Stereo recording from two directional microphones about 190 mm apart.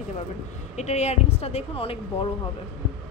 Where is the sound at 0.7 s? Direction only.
35° left (ahead or behind).